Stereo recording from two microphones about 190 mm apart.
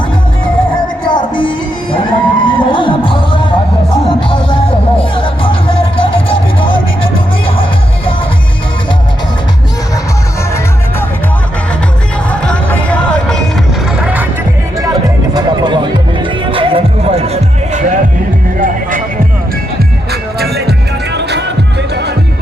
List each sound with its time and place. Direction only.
1.1 s music: 25° left (ahead or behind)
4.5 s music: 25° left (ahead or behind)
12.3 s music: 5° left (ahead or behind)
14.0 s music: 5° right (ahead or behind)
14.8 s music: 20° right (ahead or behind); by 18.0 s 35° right (ahead or behind)
18.6 s music: 45° right (ahead or behind)
20.4 s music: 60° right (ahead or behind)